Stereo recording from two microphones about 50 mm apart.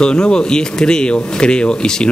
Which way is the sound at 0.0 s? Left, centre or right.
Centre.